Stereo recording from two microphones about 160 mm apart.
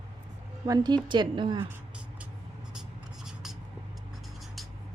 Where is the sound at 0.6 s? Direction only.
25° right (ahead or behind).